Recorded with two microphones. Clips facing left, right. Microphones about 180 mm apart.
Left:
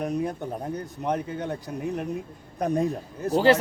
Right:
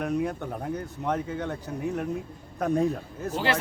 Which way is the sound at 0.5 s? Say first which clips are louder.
Even; 20° left (ahead or behind).